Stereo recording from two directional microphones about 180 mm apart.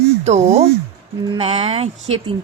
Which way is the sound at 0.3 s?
40° right (ahead or behind).